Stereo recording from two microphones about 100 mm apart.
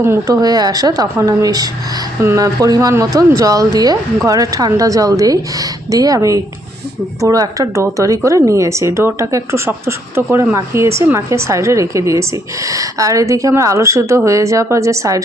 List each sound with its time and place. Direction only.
0.3 s a woman's voice: 40° right (ahead or behind)